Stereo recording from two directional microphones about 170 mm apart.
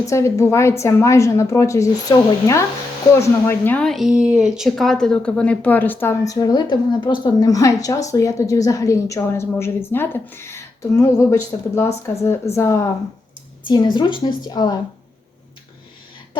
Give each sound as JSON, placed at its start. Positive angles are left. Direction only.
{"t": 0.0, "sound": "a woman's voice", "side_deg": 15}
{"t": 13.7, "sound": "a woman's voice", "side_deg": 25}